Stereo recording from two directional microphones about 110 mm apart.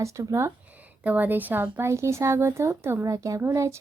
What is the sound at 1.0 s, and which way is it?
A woman's voice, 15° right (ahead or behind).